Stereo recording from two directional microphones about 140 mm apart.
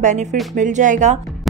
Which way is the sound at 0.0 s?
55° right (ahead or behind).